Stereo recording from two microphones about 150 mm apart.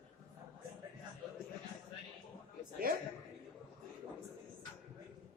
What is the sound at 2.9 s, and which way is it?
Speech, 75° right (ahead or behind).